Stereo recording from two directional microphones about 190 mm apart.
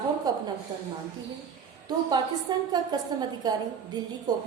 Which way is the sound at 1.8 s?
20° right (ahead or behind).